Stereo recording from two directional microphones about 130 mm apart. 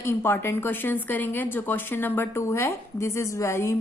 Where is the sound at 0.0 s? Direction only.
20° left (ahead or behind).